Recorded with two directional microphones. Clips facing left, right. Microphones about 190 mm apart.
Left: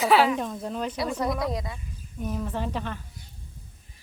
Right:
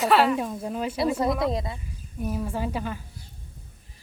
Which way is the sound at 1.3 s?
25° right (ahead or behind).